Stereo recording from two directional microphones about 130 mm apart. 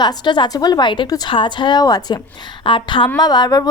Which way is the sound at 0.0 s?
35° left (ahead or behind).